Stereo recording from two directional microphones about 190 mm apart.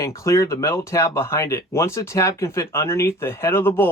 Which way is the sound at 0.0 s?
15° left (ahead or behind).